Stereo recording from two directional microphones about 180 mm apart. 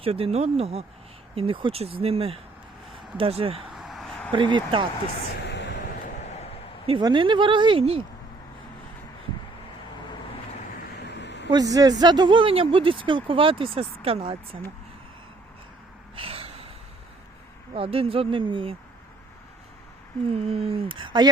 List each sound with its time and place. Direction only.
0.0 s speech: 35° right (ahead or behind)
3.8 s a sound: centre (ahead or behind)
4.3 s speech: 25° right (ahead or behind)
5.5 s vehicle: 75° left (ahead or behind)
6.8 s speech: 25° right (ahead or behind)
11.0 s a sound: 75° left (ahead or behind)
11.5 s speech: 20° right (ahead or behind)
16.1 s gasp: 30° right (ahead or behind)
17.7 s speech: 30° right (ahead or behind)
20.3 s speech: 35° right (ahead or behind)